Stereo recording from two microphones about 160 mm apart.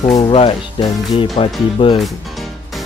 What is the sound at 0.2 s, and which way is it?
Speech, 35° left (ahead or behind).